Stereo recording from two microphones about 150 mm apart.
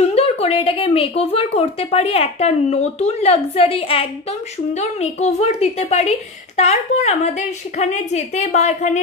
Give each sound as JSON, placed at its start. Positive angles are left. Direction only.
{"t": 0.0, "sound": "speech", "side_deg": 45}